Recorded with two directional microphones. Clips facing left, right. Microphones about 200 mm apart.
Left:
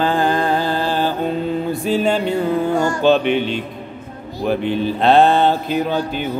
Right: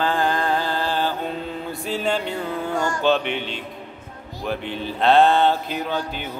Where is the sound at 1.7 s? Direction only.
10° left (ahead or behind).